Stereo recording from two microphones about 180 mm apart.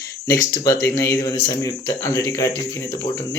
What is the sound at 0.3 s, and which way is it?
Speech, 15° left (ahead or behind).